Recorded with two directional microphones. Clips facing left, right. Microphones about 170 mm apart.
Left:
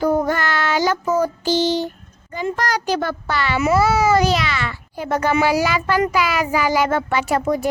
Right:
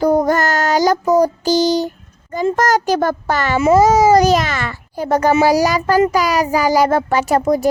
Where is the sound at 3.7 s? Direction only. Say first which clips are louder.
Right 6 dB; 40° right (ahead or behind).